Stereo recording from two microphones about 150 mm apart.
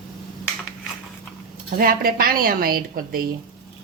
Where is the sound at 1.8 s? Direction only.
75° right (ahead or behind).